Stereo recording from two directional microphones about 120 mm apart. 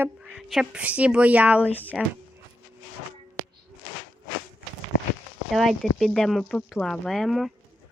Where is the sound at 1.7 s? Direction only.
15° left (ahead or behind).